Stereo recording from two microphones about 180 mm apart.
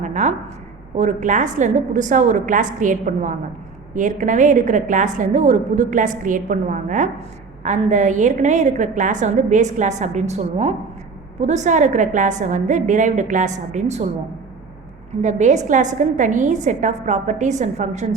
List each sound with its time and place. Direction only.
0.0 s a woman's voice: 40° right (ahead or behind)
15.2 s a woman's voice: 40° right (ahead or behind)